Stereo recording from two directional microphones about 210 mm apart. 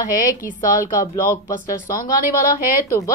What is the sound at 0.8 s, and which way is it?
Speech, 15° left (ahead or behind).